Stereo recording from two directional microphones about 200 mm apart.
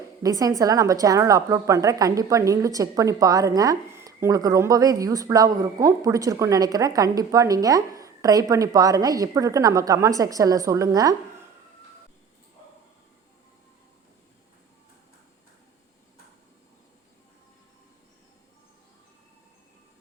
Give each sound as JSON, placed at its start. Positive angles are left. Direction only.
{"t": 0.2, "sound": "a woman's voice", "side_deg": -15}